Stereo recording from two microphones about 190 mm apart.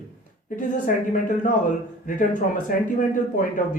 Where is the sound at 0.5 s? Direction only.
45° left (ahead or behind).